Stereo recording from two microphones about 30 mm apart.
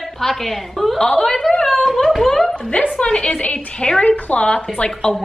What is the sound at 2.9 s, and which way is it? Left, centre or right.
A woman's voice, left.